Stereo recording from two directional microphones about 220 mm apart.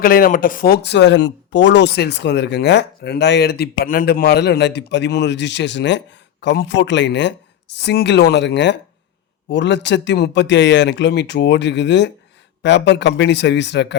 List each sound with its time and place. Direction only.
0.0 s speech: 40° left (ahead or behind)